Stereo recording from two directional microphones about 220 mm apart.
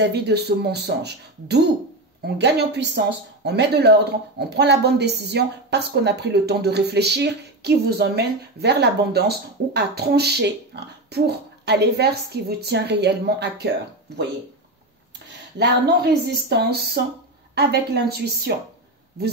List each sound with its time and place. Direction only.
0.0 s a woman's voice: 50° right (ahead or behind)
15.2 s a woman's voice: 50° right (ahead or behind)